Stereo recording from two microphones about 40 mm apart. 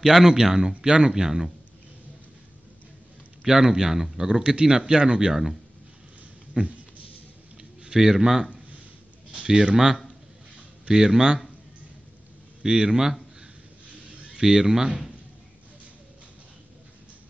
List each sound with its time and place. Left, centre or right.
0.0 s speech: centre
3.4 s speech: centre
6.5 s speech: centre
7.8 s speech: centre
12.6 s speech: centre
14.3 s speech: centre